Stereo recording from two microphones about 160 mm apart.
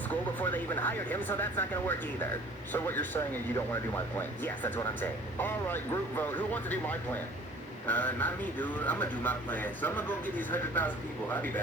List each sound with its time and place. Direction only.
0.1 s speech: 10° left (ahead or behind)